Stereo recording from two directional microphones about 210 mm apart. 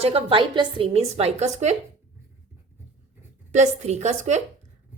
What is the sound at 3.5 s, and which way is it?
Speech, 35° right (ahead or behind).